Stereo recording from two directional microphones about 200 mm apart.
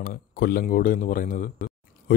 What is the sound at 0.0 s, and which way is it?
Speech, 45° left (ahead or behind).